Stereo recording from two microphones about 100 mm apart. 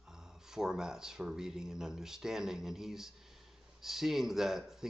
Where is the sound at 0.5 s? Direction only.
5° right (ahead or behind).